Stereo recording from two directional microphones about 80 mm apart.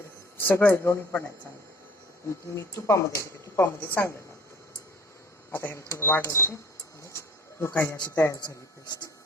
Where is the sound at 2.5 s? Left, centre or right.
Left.